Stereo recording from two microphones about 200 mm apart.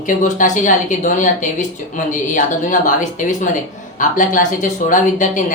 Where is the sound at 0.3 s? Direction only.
40° left (ahead or behind).